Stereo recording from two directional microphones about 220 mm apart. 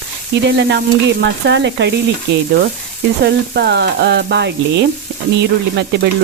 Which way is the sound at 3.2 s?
50° right (ahead or behind).